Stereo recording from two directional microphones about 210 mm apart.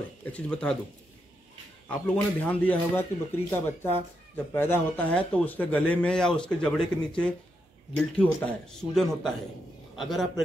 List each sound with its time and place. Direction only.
0.2 s speech: 5° left (ahead or behind)
1.9 s speech: 10° left (ahead or behind)